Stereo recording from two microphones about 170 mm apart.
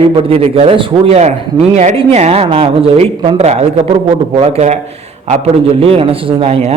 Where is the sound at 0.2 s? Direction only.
35° right (ahead or behind).